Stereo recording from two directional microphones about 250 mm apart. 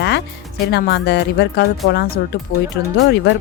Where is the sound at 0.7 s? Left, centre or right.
Left.